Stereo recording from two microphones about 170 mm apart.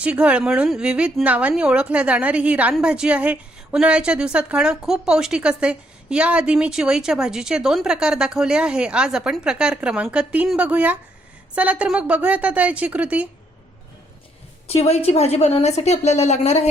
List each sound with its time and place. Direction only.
0.0 s a woman's voice: 5° right (ahead or behind)
14.7 s a woman's voice: 35° left (ahead or behind)